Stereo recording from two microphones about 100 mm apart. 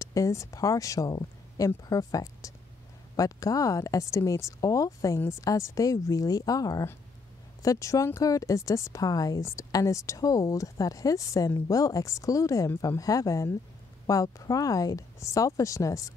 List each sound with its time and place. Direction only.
0.0 s a woman's voice: 35° left (ahead or behind)